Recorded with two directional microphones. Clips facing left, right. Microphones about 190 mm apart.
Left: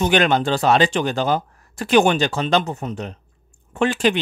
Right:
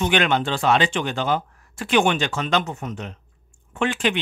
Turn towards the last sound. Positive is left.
turn(degrees=35)  # may be behind; listen again after turning